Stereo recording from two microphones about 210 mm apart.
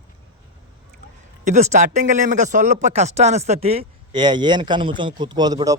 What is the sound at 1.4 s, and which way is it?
A man's voice, 35° right (ahead or behind).